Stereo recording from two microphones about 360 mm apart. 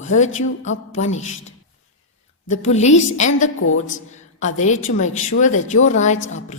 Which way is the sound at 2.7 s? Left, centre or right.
Centre.